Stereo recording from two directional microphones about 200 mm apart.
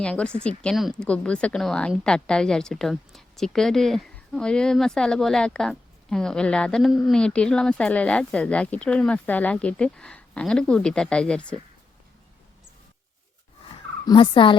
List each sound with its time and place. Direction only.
0.0 s a woman's voice: 5° left (ahead or behind)
14.1 s speech: 25° left (ahead or behind)